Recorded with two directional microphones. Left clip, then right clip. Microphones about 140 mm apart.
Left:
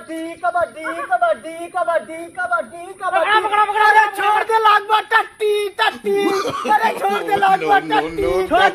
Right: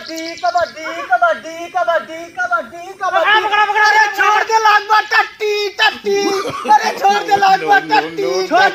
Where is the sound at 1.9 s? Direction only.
35° left (ahead or behind).